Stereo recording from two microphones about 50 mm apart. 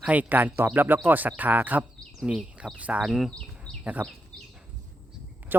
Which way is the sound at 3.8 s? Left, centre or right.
Right.